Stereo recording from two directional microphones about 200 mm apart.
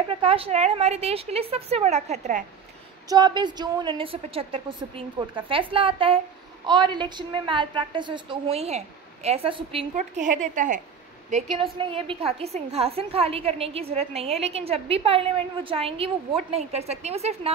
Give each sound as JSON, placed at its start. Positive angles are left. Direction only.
{"t": 0.1, "sound": "a woman's voice", "side_deg": -30}
{"t": 3.1, "sound": "a woman's voice", "side_deg": -20}
{"t": 11.5, "sound": "a woman's voice", "side_deg": -25}